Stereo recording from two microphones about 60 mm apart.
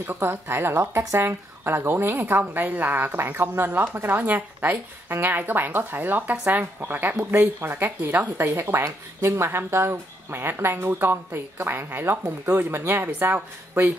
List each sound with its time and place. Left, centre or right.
0.0 s speech: right